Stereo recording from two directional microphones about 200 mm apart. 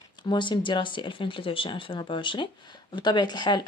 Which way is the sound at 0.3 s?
25° left (ahead or behind).